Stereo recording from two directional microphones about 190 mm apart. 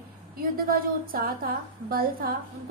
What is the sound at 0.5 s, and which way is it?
A woman's voice, 50° right (ahead or behind).